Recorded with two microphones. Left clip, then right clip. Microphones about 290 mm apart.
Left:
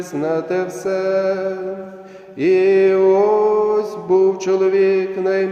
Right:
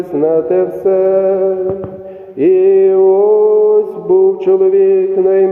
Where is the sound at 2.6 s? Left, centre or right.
Left.